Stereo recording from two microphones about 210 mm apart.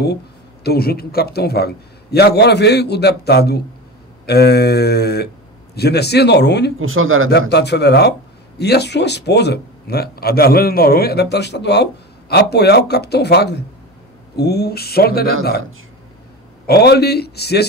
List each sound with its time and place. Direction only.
0.7 s speech: 45° left (ahead or behind)
6.8 s speech: 75° right (ahead or behind)
7.2 s speech: 50° left (ahead or behind)
16.6 s speech: 50° left (ahead or behind)